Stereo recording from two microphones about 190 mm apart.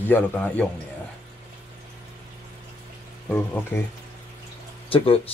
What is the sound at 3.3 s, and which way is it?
Speech, 10° left (ahead or behind).